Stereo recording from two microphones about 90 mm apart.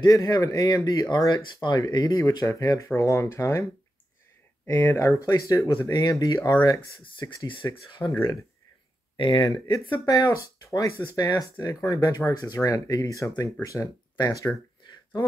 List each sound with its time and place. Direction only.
0.0 s speech: 45° left (ahead or behind)
4.6 s speech: 25° left (ahead or behind)
9.1 s speech: 60° left (ahead or behind)
10.0 s speech: 40° left (ahead or behind)
11.2 s speech: 35° left (ahead or behind)
14.1 s speech: 50° left (ahead or behind)